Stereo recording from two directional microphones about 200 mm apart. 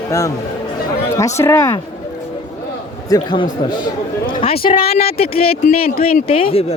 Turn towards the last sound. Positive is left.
turn(degrees=25)  # may be behind; listen again after turning